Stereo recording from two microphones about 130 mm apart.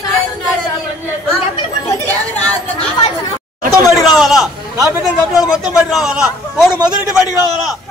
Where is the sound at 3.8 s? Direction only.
30° left (ahead or behind).